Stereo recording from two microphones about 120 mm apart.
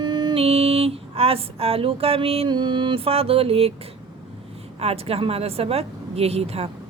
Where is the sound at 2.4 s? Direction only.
40° right (ahead or behind).